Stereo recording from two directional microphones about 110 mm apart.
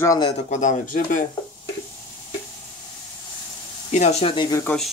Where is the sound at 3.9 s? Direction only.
85° left.